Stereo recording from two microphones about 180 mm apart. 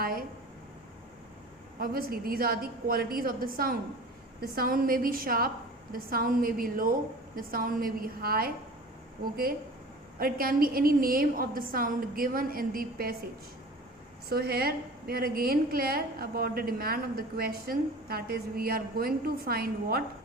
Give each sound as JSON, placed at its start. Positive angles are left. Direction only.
{"t": 0.0, "sound": "a sound", "side_deg": -55}
{"t": 1.8, "sound": "a woman's voice", "side_deg": -55}
{"t": 14.3, "sound": "a woman's voice", "side_deg": -60}